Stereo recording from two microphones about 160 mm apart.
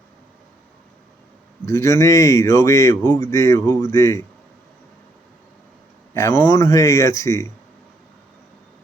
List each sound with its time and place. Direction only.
1.6 s a man's voice: 20° left (ahead or behind)
6.1 s a man's voice: 15° left (ahead or behind)